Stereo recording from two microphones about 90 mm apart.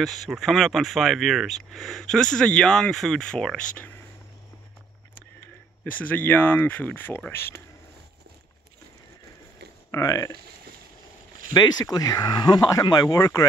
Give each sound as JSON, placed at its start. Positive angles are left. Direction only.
{"t": 0.0, "sound": "speech", "side_deg": 0}
{"t": 5.9, "sound": "speech", "side_deg": 20}
{"t": 9.8, "sound": "speech", "side_deg": 40}
{"t": 11.5, "sound": "speech", "side_deg": 50}